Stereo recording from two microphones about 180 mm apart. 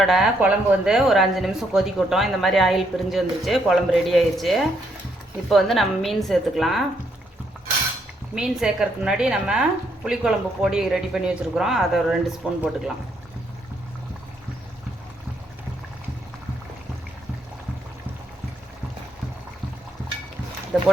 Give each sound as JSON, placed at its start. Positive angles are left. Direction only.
{"t": 0.0, "sound": "speech", "side_deg": 0}
{"t": 8.4, "sound": "speech", "side_deg": -5}
{"t": 20.7, "sound": "speech", "side_deg": 0}